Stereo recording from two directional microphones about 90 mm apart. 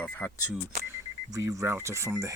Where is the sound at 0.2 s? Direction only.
15° left (ahead or behind).